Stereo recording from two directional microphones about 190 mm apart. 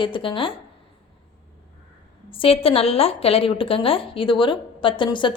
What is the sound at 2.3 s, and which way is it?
A woman's voice, 30° left (ahead or behind).